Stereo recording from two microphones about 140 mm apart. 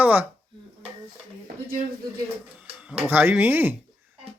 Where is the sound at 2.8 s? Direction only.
5° right (ahead or behind).